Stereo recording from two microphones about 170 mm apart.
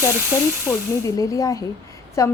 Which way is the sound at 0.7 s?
5° right (ahead or behind).